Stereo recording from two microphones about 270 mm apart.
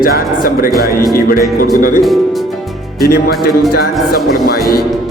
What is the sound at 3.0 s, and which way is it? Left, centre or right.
Speech, left.